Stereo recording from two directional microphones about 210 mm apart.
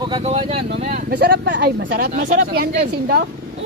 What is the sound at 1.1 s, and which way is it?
Speech, 45° right (ahead or behind).